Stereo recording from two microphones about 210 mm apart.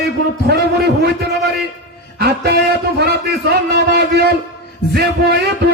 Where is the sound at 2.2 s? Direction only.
50° right (ahead or behind).